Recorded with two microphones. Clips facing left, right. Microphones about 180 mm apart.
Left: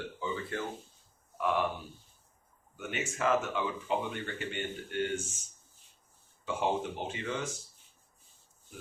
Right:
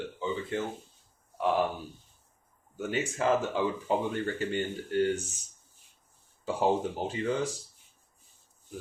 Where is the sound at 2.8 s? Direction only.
35° right (ahead or behind).